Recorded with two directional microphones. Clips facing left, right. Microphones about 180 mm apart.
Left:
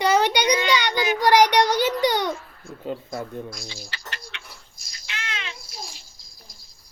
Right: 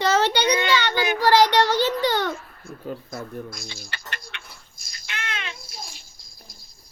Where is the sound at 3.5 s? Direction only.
55° right (ahead or behind).